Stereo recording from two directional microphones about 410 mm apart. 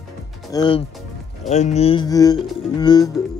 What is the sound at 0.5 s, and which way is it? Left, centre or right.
Speech, centre.